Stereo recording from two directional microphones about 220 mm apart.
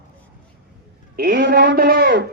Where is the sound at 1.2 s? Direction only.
45° right (ahead or behind).